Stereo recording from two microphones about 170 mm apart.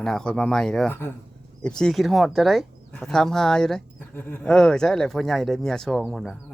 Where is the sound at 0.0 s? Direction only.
5° left (ahead or behind).